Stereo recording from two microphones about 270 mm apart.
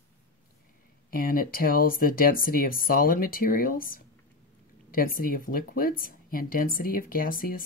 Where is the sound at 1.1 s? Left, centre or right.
Left.